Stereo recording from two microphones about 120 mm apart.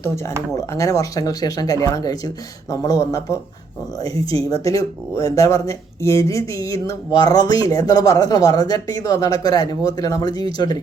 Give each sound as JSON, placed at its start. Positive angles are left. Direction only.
{"t": 0.0, "sound": "speech", "side_deg": 25}